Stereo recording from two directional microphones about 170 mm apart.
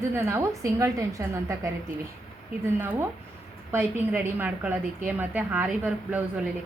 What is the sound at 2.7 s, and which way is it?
A woman's voice, 10° right (ahead or behind).